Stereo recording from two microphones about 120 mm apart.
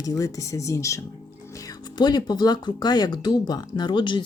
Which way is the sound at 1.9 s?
35° left (ahead or behind).